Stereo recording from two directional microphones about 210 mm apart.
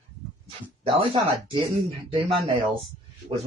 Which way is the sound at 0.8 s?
25° right (ahead or behind).